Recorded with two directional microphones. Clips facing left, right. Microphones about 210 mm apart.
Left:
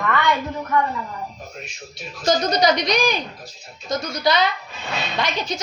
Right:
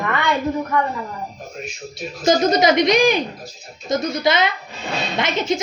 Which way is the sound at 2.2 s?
25° right (ahead or behind).